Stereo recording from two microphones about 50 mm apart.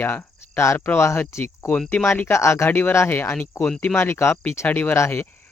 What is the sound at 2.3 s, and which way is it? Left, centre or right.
Speech, left.